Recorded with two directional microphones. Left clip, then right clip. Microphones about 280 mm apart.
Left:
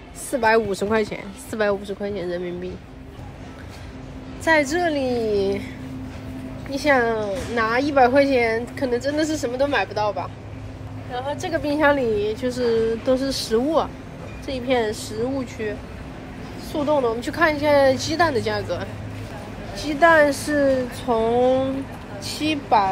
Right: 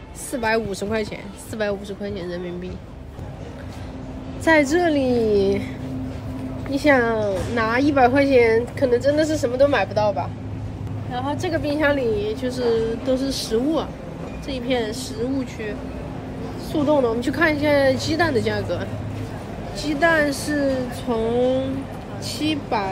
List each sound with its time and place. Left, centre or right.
0.3 s speech: centre
4.5 s a woman's voice: centre
6.7 s a woman's voice: centre
11.7 s a woman's voice: centre
16.7 s a woman's voice: centre